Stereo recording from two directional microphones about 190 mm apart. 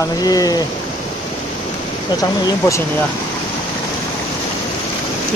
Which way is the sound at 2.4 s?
15° left (ahead or behind).